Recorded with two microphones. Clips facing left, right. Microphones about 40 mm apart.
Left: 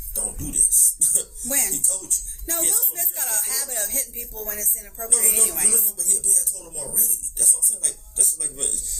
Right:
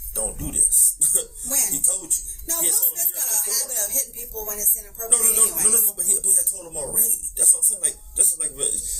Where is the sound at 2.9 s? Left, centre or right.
Left.